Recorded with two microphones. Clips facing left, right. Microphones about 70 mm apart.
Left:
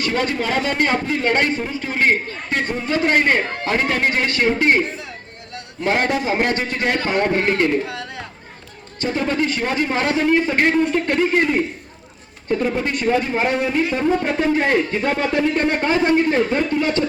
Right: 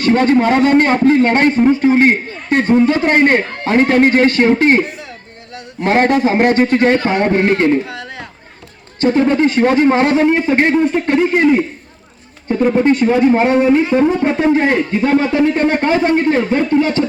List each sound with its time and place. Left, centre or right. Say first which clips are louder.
0.0 s a man's voice: right 9 dB; right
2.5 s a man's voice: right 10 dB; right
5.9 s a man's voice: right 7 dB; right
7.2 s speech: right 5 dB; centre
9.0 s a man's voice: right 8 dB; right
10.2 s speech: right 4 dB; right
10.9 s speech: right 4 dB; centre
12.5 s speech: right 8 dB; right
15.2 s speech: right 5 dB; centre
15.8 s speech: right 3 dB; right